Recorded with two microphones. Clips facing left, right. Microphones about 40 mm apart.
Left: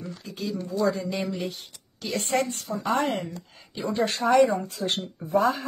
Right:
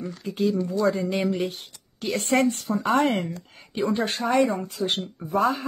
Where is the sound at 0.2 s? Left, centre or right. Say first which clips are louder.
Right 9 dB; right.